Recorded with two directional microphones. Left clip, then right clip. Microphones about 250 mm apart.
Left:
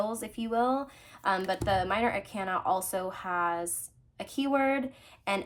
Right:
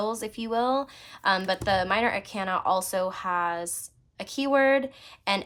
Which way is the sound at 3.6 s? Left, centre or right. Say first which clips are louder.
Right 1 dB; centre.